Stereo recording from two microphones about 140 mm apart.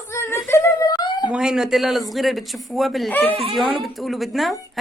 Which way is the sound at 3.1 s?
10° left (ahead or behind).